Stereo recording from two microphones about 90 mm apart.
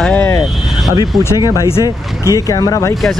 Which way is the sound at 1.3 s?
45° left (ahead or behind).